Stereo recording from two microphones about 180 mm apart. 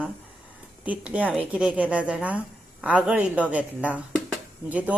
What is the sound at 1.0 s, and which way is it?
A woman's voice, 5° right (ahead or behind).